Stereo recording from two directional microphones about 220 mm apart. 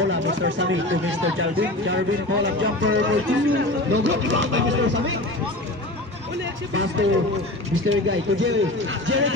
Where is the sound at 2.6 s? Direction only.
55° right (ahead or behind).